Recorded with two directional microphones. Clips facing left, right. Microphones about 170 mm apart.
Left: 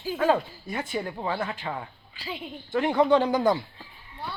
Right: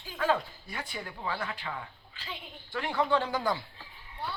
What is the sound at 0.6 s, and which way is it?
Speech, 25° left (ahead or behind).